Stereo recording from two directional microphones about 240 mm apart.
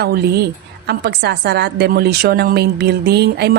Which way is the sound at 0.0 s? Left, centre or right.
Right.